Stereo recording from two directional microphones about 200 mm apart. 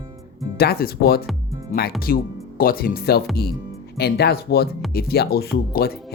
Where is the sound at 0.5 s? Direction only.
50° left (ahead or behind).